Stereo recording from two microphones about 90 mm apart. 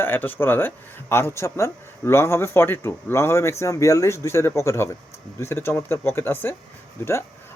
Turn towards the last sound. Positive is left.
turn(degrees=30)  # may be behind; listen again after turning